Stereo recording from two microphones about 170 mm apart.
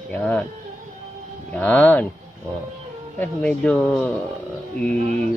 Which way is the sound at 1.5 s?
10° left (ahead or behind).